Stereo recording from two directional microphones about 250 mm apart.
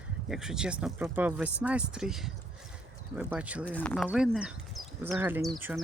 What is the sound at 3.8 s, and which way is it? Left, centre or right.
Speech, centre.